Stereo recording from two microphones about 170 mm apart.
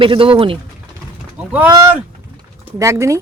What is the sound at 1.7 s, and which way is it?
Speech, 20° right (ahead or behind).